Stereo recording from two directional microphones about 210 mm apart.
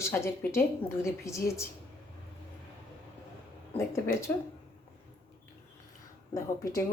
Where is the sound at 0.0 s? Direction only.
10° left (ahead or behind).